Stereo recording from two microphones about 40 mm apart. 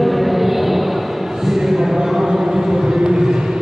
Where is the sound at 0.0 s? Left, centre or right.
Centre.